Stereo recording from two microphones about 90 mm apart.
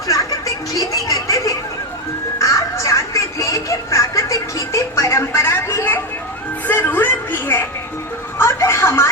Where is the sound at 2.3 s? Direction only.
35° left (ahead or behind).